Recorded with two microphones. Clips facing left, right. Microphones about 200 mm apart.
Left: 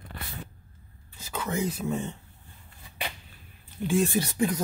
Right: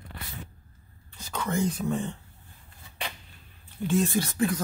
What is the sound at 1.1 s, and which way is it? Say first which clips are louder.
Speech: right 1 dB; 5° left (ahead or behind).